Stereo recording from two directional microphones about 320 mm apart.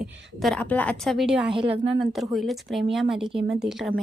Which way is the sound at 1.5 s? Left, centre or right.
Centre.